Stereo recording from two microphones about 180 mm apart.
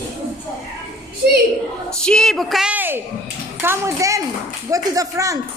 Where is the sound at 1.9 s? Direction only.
5° left (ahead or behind).